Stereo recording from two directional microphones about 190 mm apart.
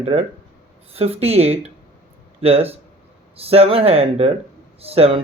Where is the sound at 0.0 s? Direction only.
35° right (ahead or behind).